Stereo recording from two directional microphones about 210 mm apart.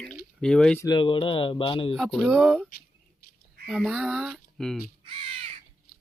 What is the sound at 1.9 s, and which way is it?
Speech, centre (ahead or behind).